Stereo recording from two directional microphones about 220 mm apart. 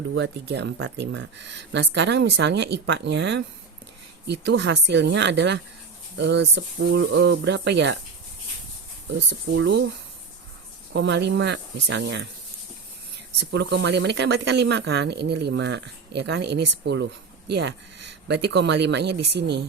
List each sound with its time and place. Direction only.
0.1 s speech: 55° right (ahead or behind)
9.1 s speech: 50° right (ahead or behind)
10.9 s speech: 50° right (ahead or behind)
13.4 s speech: 50° right (ahead or behind)